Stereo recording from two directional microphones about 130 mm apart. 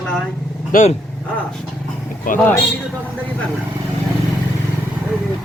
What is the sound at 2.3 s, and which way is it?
Speech, 90° left.